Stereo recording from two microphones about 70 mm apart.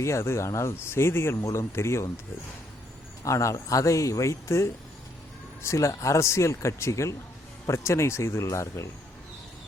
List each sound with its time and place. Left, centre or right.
0.0 s speech: left
3.2 s speech: left